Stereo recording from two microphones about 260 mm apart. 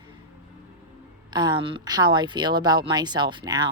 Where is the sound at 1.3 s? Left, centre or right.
Centre.